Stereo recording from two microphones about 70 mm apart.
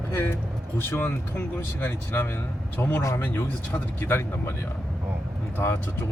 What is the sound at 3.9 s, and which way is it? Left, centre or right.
Speech, left.